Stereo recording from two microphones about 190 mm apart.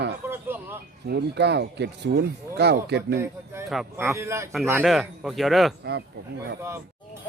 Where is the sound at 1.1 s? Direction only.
65° right (ahead or behind).